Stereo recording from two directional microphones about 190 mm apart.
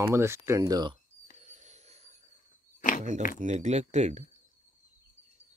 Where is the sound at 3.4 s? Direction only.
40° right (ahead or behind).